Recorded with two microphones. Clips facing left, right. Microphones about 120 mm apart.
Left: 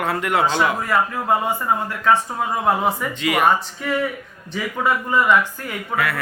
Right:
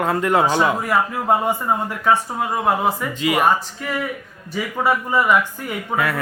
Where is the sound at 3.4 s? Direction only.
Centre (ahead or behind).